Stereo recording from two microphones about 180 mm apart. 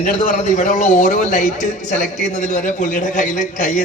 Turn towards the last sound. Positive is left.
turn(degrees=45)  # may be behind; listen again after turning